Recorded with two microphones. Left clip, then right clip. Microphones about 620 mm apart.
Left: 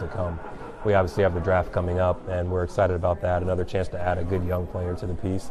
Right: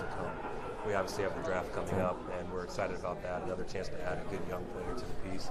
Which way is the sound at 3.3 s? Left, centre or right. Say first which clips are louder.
Left 12 dB; left.